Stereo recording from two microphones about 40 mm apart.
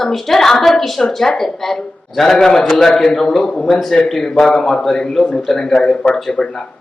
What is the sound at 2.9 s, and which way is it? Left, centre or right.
A man's voice, centre.